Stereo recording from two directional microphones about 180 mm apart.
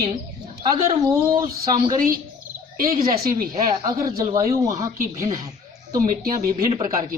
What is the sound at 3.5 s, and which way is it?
Speech, 20° right (ahead or behind).